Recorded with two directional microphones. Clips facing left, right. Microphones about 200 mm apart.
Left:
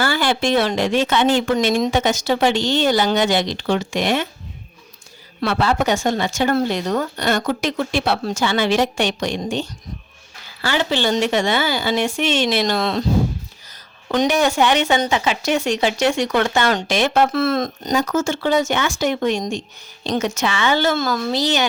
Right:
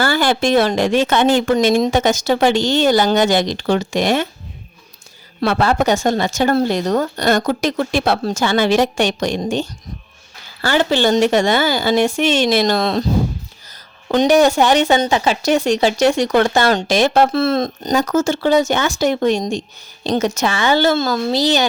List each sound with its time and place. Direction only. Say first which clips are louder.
0.0 s speech: right 3 dB; 45° right (ahead or behind)
5.4 s speech: right 3 dB; 45° right (ahead or behind)
14.1 s speech: right 5 dB; 35° right (ahead or behind)
17.9 s speech: right 3 dB; 40° right (ahead or behind)